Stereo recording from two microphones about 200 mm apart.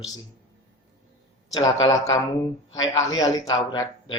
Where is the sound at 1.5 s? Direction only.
20° left (ahead or behind).